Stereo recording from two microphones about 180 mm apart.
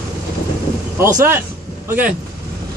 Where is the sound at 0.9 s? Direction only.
15° right (ahead or behind).